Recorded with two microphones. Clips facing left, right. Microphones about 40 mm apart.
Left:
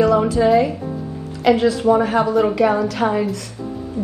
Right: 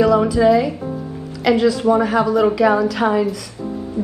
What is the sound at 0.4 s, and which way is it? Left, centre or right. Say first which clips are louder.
Speech: right 3 dB; centre.